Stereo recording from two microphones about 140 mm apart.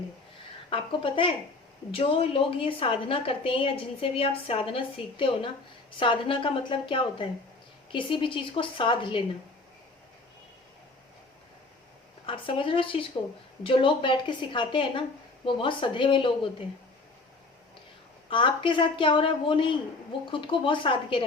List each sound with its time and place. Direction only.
0.7 s a woman's voice: 35° left (ahead or behind)
12.2 s a woman's voice: 40° left (ahead or behind)
18.3 s a woman's voice: 35° left (ahead or behind)